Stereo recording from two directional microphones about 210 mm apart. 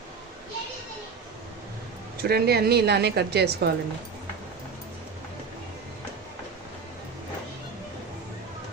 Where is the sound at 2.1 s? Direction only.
50° right (ahead or behind).